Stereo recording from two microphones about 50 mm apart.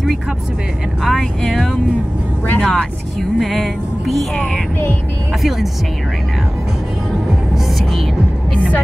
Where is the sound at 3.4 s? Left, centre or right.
Centre.